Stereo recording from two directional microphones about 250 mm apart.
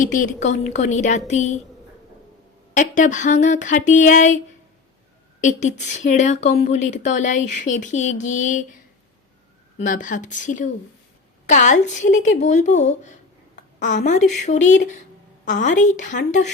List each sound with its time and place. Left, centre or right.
0.0 s a woman's voice: left
2.7 s a woman's voice: left
5.4 s a woman's voice: left
9.7 s a woman's voice: left